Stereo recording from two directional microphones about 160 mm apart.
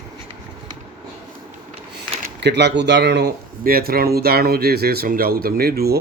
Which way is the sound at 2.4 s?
90° right.